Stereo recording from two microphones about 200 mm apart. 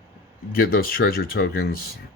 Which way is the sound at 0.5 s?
45° left (ahead or behind).